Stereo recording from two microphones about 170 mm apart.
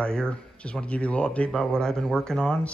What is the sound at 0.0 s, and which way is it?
Speech, 5° left (ahead or behind).